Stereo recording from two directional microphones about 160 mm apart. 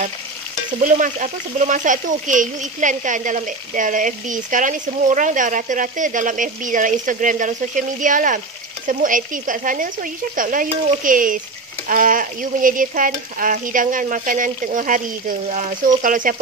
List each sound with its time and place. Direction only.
0.7 s speech: 55° right (ahead or behind)
8.8 s stir: 55° right (ahead or behind)